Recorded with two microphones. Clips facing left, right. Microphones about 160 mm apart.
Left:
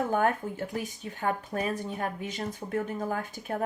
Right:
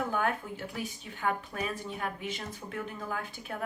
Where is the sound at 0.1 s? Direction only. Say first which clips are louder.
Left 5 dB; 45° left (ahead or behind).